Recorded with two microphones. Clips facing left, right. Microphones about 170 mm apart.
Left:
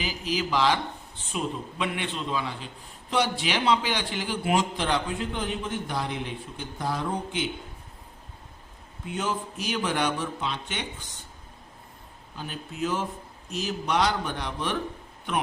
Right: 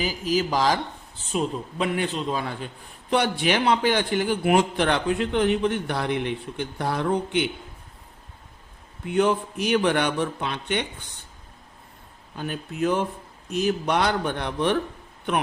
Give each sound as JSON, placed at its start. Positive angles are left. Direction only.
{"t": 0.0, "sound": "a man's voice", "side_deg": -45}
{"t": 9.0, "sound": "a man's voice", "side_deg": -60}
{"t": 12.4, "sound": "a man's voice", "side_deg": -55}